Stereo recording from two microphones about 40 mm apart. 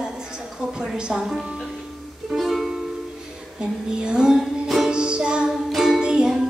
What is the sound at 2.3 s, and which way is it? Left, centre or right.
Music, centre.